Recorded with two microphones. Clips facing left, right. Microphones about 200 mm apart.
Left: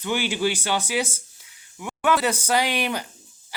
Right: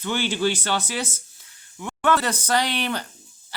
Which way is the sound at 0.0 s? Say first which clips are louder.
Even; 10° left (ahead or behind).